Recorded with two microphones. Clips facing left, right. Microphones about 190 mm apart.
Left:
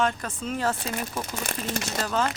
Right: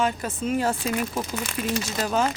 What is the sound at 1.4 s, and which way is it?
Speech, 50° left (ahead or behind).